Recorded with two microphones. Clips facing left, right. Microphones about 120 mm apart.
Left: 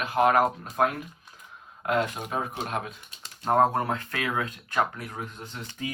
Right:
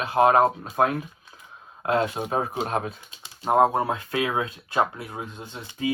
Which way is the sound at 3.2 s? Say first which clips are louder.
Right 2 dB; 10° right (ahead or behind).